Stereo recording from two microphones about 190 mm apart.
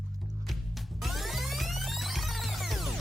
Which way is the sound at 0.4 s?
Centre (ahead or behind).